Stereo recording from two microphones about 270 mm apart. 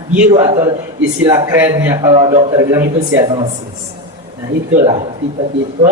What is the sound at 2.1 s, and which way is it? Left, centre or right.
A man's voice, right.